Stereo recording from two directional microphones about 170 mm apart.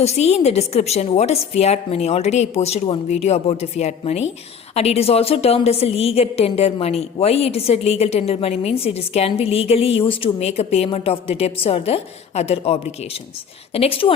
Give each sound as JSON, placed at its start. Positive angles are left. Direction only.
{"t": 0.0, "sound": "a woman's voice", "side_deg": 40}